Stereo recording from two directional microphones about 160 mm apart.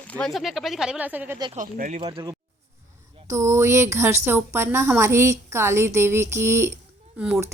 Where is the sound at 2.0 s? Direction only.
30° right (ahead or behind).